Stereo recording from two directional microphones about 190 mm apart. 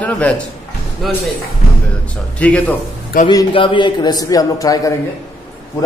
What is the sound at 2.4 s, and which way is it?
Speech, 10° left (ahead or behind).